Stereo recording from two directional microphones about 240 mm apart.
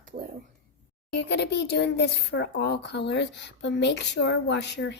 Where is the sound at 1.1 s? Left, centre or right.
Left.